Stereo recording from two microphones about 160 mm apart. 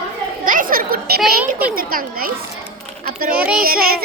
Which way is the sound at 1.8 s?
65° right (ahead or behind).